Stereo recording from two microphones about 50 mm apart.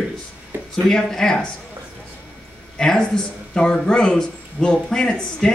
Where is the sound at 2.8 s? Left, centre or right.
Centre.